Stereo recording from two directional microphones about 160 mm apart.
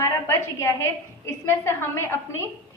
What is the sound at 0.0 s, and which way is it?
A woman's voice, 15° left (ahead or behind).